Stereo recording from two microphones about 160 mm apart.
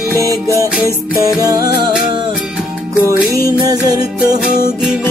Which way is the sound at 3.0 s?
20° right (ahead or behind).